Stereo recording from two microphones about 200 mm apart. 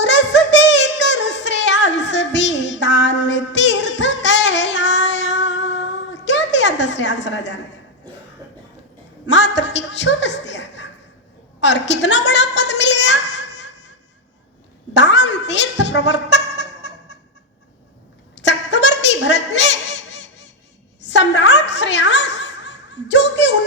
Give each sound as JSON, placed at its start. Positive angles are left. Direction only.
{"t": 0.0, "sound": "a sound", "side_deg": 65}
{"t": 9.2, "sound": "a man's voice", "side_deg": 60}
{"t": 11.6, "sound": "a sound", "side_deg": 60}
{"t": 14.9, "sound": "music", "side_deg": 60}
{"t": 18.3, "sound": "honk", "side_deg": 60}
{"t": 21.0, "sound": "snicker", "side_deg": 60}